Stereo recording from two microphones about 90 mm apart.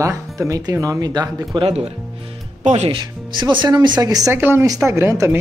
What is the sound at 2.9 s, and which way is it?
Speech, 60° right (ahead or behind).